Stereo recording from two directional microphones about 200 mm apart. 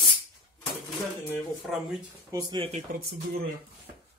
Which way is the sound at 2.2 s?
20° right (ahead or behind).